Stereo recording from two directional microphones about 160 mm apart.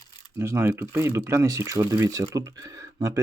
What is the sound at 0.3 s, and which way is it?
Speech, 15° right (ahead or behind).